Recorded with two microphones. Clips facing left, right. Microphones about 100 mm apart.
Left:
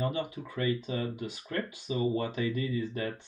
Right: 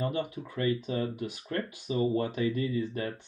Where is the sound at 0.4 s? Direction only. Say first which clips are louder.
Right 1 dB; 30° right (ahead or behind).